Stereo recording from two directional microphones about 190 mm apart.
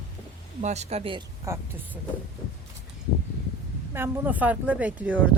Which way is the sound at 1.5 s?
15° right (ahead or behind).